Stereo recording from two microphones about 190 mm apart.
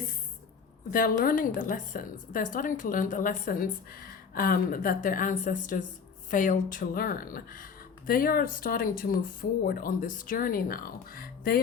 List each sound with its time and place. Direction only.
0.9 s speech: 50° left (ahead or behind)